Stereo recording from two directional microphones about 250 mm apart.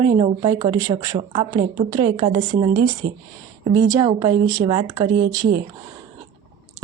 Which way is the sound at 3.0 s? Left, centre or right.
Right.